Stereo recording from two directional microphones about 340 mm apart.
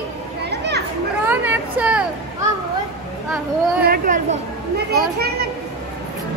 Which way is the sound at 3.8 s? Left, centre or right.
Right.